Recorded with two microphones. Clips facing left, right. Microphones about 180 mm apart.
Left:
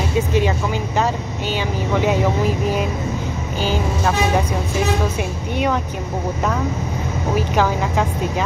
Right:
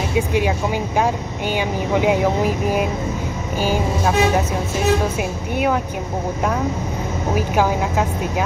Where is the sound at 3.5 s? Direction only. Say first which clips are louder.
Right 2 dB; 10° right (ahead or behind).